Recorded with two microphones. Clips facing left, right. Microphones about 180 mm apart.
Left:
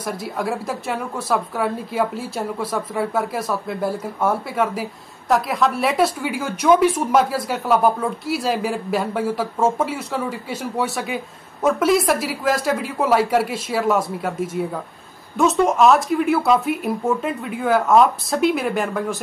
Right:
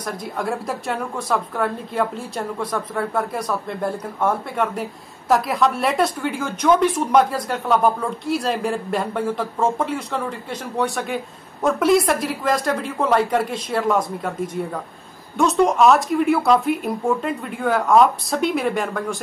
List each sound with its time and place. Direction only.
0.0 s a woman's voice: 5° left (ahead or behind)